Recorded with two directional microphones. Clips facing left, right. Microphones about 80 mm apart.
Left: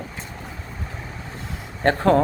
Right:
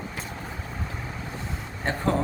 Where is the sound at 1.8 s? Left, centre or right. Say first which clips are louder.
Left 9 dB; left.